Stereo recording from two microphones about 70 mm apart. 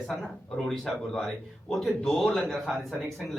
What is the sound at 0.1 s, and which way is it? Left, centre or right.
A man's voice, centre.